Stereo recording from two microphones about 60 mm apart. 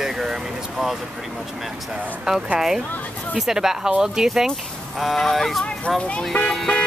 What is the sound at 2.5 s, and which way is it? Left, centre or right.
Speech, centre.